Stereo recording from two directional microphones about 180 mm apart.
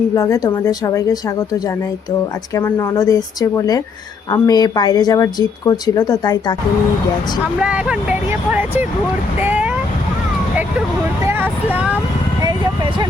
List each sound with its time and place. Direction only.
0.1 s speech: 15° left (ahead or behind)
2.6 s speech: 15° left (ahead or behind)
7.6 s speech: 5° right (ahead or behind)
11.3 s speech: 10° right (ahead or behind)